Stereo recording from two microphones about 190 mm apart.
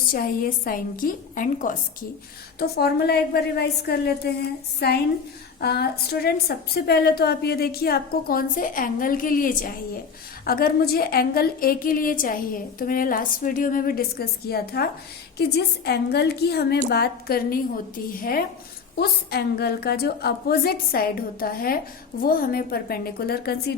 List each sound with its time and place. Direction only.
0.1 s a woman's voice: 50° left (ahead or behind)
2.6 s a woman's voice: 55° left (ahead or behind)